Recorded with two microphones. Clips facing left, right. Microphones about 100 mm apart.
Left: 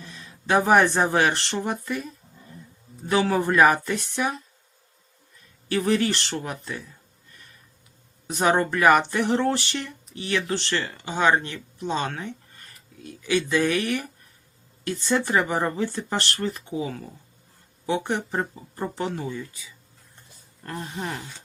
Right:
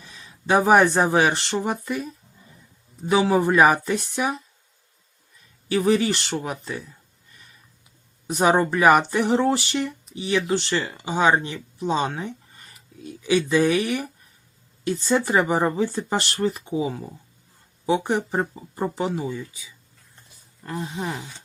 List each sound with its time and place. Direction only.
0.0 s speech: 10° right (ahead or behind)
3.1 s speech: 10° right (ahead or behind)
5.6 s speech: 10° right (ahead or behind)
8.3 s speech: 15° right (ahead or behind)